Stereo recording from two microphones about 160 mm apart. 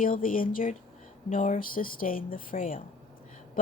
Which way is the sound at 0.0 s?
60° left (ahead or behind).